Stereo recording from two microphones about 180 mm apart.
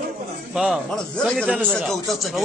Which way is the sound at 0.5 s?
Centre (ahead or behind).